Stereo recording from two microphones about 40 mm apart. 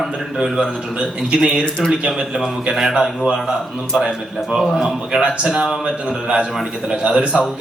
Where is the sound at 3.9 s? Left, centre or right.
Right.